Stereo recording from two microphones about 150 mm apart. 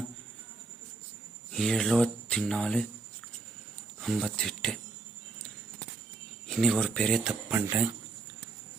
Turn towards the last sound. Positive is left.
turn(degrees=-15)  # may be behind; listen again after turning